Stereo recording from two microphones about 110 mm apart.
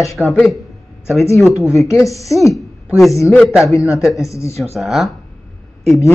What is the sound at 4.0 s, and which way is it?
Speech, 5° right (ahead or behind).